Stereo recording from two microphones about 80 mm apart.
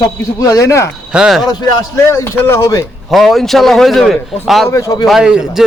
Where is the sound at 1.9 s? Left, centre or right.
Left.